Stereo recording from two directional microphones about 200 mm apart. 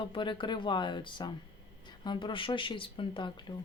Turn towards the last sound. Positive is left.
turn(degrees=25)  # may be behind; listen again after turning